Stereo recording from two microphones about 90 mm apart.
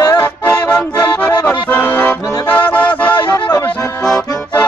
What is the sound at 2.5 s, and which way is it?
Music, 15° left (ahead or behind).